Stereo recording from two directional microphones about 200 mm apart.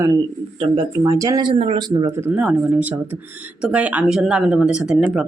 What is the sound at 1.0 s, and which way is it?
Speech, 15° right (ahead or behind).